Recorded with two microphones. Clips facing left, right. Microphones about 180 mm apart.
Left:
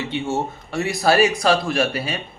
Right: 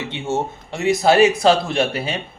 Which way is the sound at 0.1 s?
20° right (ahead or behind).